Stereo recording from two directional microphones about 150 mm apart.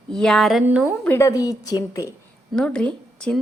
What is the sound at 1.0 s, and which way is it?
A woman's voice, 15° left (ahead or behind).